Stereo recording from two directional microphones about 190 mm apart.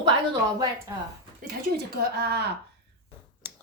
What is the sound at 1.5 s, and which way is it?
Speech, 55° right (ahead or behind).